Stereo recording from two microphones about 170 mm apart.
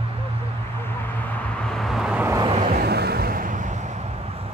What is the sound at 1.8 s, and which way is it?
Vehicle, centre (ahead or behind).